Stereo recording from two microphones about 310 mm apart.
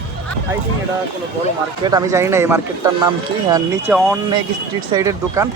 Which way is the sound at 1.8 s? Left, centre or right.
Centre.